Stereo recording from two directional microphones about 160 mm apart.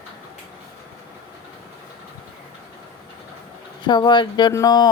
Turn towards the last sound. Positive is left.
turn(degrees=25)  # may be behind; listen again after turning